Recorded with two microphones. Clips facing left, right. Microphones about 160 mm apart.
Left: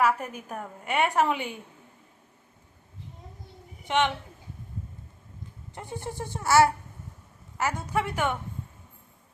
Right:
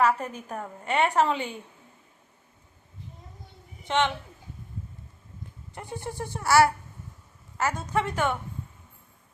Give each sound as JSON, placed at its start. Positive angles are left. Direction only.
{"t": 0.2, "sound": "a woman's voice", "side_deg": 10}
{"t": 3.8, "sound": "a woman's voice", "side_deg": 15}
{"t": 5.7, "sound": "a woman's voice", "side_deg": 20}